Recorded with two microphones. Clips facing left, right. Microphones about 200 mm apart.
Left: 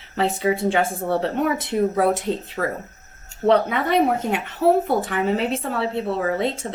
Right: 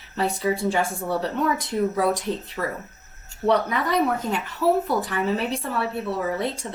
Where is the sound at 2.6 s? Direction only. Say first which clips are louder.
Left 4 dB; 50° left (ahead or behind).